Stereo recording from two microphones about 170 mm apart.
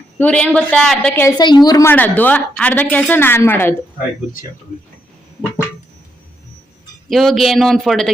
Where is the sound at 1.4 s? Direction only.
25° left (ahead or behind).